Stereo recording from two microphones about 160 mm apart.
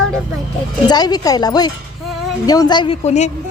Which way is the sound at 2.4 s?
25° left (ahead or behind).